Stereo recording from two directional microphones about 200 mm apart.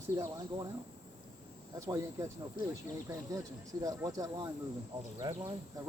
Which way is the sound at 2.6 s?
45° left (ahead or behind).